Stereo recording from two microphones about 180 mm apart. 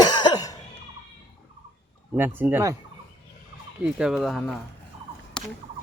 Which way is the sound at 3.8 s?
5° right (ahead or behind).